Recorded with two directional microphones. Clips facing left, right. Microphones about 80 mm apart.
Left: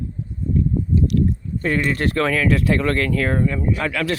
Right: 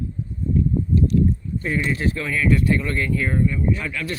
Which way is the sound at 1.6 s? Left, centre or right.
Left.